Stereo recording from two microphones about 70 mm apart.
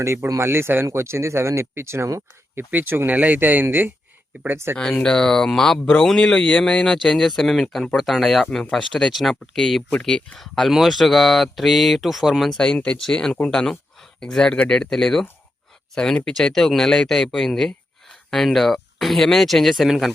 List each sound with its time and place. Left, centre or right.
0.3 s speech: right
2.6 s speech: right
5.0 s speech: centre